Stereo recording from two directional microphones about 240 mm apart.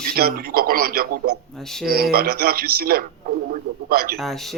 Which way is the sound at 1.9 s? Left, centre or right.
Right.